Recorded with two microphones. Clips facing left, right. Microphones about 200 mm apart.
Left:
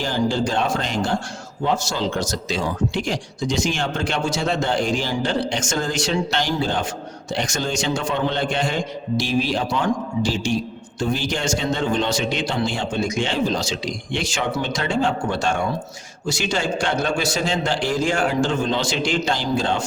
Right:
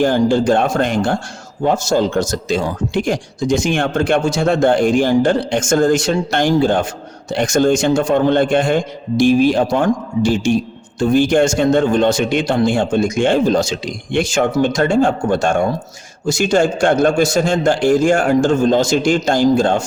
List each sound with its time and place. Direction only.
0.0 s speech: 55° right (ahead or behind)